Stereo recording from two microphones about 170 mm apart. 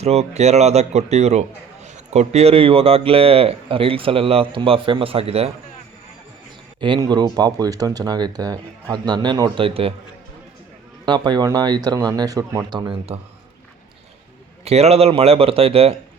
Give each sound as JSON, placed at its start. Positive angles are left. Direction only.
{"t": 0.0, "sound": "a man's voice", "side_deg": -40}
{"t": 6.7, "sound": "speech", "side_deg": -30}
{"t": 11.0, "sound": "speech", "side_deg": -25}
{"t": 14.6, "sound": "a man's voice", "side_deg": -40}